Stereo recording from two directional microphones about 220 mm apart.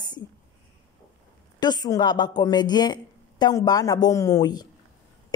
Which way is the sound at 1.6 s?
20° left (ahead or behind).